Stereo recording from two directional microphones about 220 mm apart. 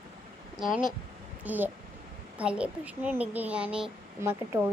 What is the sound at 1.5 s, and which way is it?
A child's voice, 10° right (ahead or behind).